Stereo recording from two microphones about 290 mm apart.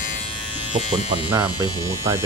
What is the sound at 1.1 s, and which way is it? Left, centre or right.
Speech, centre.